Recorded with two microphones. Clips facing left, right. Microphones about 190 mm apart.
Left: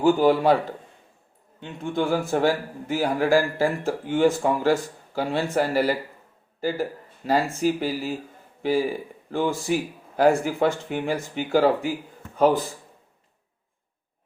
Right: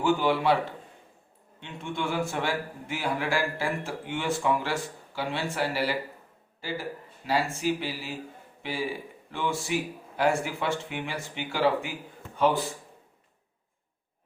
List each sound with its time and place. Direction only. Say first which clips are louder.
0.0 s speech: left 6 dB; 40° left (ahead or behind)
1.6 s speech: left 7 dB; 35° left (ahead or behind)
9.3 s speech: left 6 dB; 35° left (ahead or behind)